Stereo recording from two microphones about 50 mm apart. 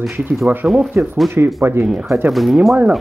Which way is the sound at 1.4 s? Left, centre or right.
Right.